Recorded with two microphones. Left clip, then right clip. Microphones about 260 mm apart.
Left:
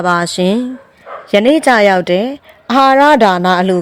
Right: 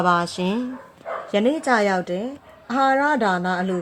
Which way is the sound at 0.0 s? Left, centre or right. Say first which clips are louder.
Left 7 dB; left.